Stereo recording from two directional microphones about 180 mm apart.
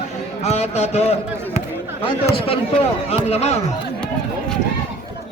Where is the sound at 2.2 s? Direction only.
35° left (ahead or behind).